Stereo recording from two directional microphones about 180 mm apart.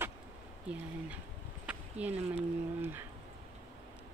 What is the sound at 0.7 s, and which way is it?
Speech, 5° right (ahead or behind).